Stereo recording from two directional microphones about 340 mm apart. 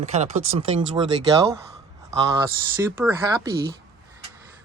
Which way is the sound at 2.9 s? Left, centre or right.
Centre.